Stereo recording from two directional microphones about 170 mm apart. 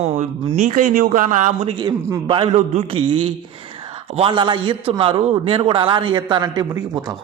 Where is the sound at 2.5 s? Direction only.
40° right (ahead or behind); by 7.1 s 20° right (ahead or behind).